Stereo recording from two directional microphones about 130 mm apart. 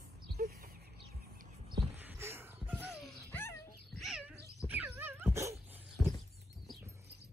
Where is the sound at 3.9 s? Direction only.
Centre (ahead or behind).